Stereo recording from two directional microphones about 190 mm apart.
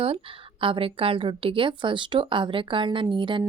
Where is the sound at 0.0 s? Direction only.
30° right (ahead or behind).